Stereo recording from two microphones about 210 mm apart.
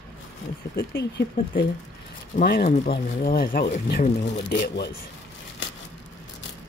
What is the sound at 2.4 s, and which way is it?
Speech, 45° left (ahead or behind).